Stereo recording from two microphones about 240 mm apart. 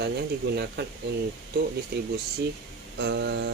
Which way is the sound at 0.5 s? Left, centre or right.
Right.